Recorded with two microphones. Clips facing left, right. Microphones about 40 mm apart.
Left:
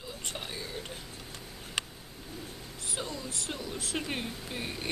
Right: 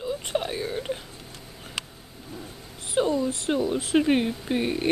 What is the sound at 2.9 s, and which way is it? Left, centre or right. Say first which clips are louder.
Speech: right 15 dB; right.